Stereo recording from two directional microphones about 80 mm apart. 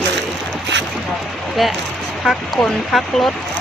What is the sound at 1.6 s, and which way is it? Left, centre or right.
Speech, centre.